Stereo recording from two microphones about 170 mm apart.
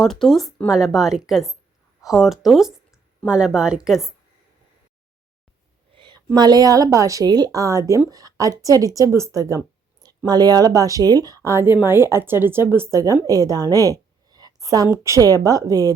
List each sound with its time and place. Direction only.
0.0 s speech: centre (ahead or behind)
5.9 s a woman's voice: 30° right (ahead or behind)